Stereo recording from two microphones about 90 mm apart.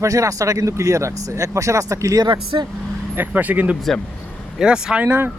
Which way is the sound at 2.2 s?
60° right (ahead or behind).